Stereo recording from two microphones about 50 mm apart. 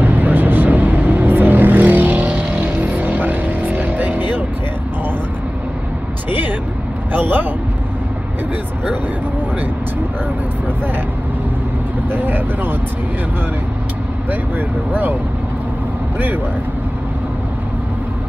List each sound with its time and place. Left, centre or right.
0.0 s vehicle: right
7.1 s a man's voice: right
12.1 s speech: right
14.9 s speech: right